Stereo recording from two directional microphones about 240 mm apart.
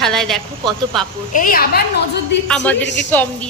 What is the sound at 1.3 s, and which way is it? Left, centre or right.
Speech, left.